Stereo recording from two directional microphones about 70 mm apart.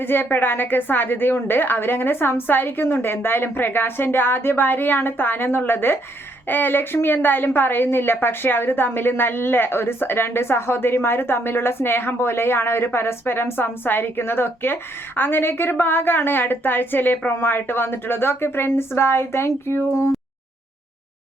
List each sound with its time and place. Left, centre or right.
0.0 s a woman's voice: left